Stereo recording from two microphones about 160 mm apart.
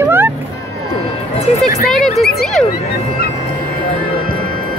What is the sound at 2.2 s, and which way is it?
Speech, centre (ahead or behind).